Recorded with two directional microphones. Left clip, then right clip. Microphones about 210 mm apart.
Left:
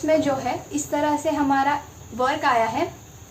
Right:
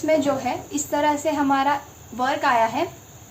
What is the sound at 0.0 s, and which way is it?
A woman's voice, 15° right (ahead or behind).